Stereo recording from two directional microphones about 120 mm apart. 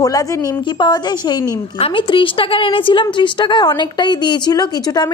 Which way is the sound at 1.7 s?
50° left (ahead or behind).